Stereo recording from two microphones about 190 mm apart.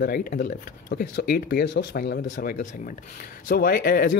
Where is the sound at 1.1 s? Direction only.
60° left (ahead or behind).